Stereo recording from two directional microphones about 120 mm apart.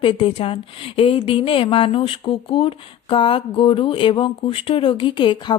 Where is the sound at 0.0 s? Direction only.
50° left (ahead or behind).